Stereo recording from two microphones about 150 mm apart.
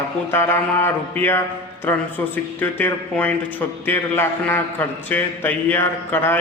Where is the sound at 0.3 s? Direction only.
15° left (ahead or behind).